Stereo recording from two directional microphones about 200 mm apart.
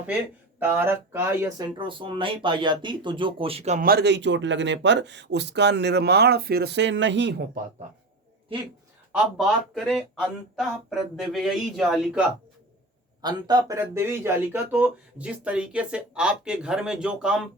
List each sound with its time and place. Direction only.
0.6 s speech: 10° right (ahead or behind)
1.6 s speech: 25° right (ahead or behind)
3.8 s speech: 55° right (ahead or behind)
9.1 s speech: 5° right (ahead or behind)
13.2 s speech: 20° right (ahead or behind); by 17.5 s 5° right (ahead or behind)